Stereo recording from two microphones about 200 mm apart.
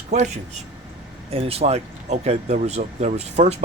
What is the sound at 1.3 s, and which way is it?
Speech, 30° right (ahead or behind).